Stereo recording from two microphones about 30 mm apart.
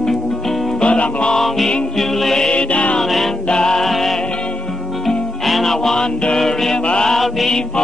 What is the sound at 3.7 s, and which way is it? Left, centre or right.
Music, centre.